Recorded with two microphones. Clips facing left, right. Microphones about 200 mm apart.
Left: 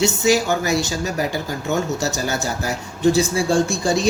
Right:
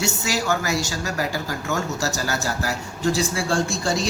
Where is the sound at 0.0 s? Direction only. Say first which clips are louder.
Left 8 dB; 20° left (ahead or behind).